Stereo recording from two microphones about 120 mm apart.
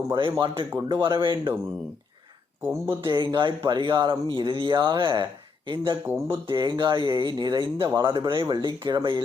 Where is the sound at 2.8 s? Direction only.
40° right (ahead or behind).